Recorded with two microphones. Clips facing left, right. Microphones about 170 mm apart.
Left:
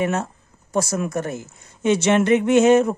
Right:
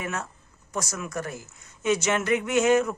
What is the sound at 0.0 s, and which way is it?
Speech, 30° left (ahead or behind).